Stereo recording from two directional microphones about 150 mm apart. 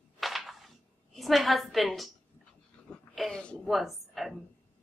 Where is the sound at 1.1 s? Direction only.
Centre (ahead or behind).